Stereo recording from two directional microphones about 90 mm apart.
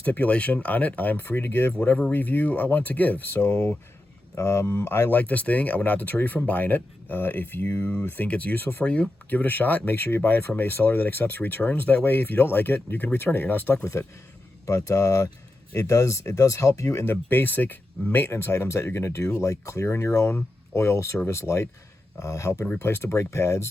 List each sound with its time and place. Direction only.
0.0 s speech: 15° left (ahead or behind); by 23.6 s 30° left (ahead or behind)